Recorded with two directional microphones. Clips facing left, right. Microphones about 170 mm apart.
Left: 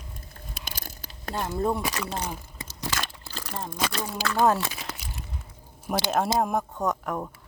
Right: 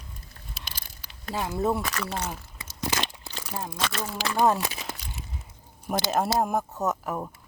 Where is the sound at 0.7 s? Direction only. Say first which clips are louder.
Left 5 dB; 45° left (ahead or behind).